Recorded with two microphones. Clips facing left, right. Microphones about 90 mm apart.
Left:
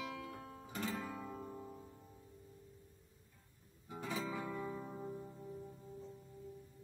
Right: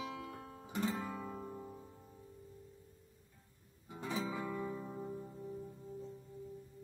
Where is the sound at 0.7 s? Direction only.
20° right (ahead or behind).